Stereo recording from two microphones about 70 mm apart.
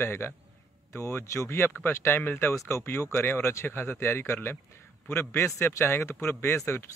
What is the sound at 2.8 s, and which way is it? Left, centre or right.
Speech, left.